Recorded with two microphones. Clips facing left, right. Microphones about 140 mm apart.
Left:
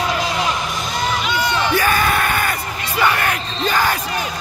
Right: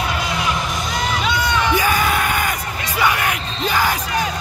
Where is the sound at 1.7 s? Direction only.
15° right (ahead or behind).